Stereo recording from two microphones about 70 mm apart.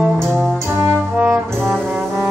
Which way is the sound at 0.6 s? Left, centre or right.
Right.